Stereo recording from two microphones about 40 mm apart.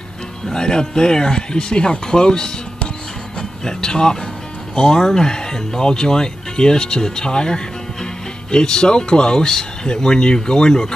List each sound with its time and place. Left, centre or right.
0.5 s speech: centre